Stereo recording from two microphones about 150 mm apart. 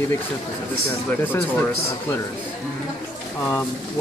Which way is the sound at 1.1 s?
15° left (ahead or behind).